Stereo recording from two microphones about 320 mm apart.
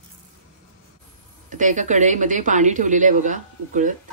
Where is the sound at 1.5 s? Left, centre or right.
Right.